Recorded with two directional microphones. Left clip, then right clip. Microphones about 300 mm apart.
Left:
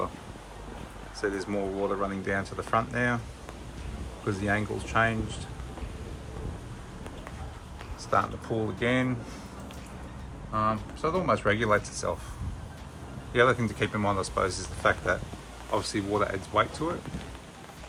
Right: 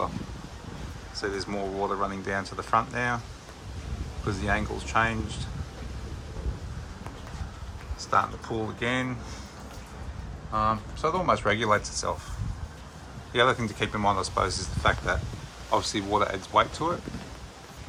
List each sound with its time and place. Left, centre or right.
1.2 s speech: centre
4.3 s speech: centre
8.1 s speech: centre
10.5 s speech: centre
13.3 s speech: centre